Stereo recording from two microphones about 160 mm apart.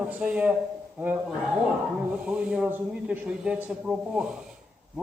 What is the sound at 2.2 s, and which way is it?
A man's voice, 10° right (ahead or behind).